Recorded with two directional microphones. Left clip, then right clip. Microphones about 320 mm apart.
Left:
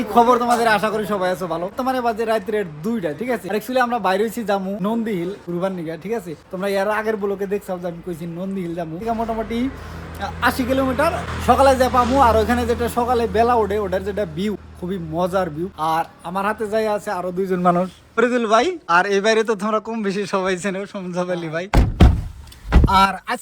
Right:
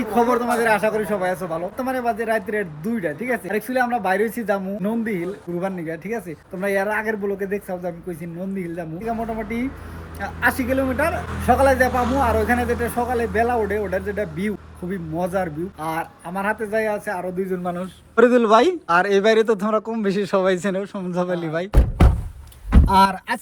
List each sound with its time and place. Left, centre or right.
0.2 s speech: centre
10.2 s speech: centre
17.5 s a man's voice: left
18.2 s speech: centre
22.9 s speech: left